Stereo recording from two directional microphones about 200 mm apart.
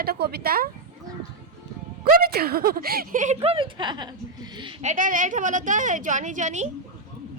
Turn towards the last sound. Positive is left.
turn(degrees=-35)  # may be behind; listen again after turning